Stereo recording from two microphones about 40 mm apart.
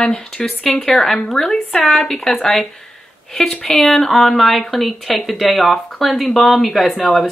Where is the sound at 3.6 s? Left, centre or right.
Centre.